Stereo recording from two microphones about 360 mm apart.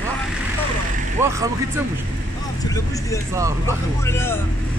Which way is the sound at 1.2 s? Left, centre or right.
Centre.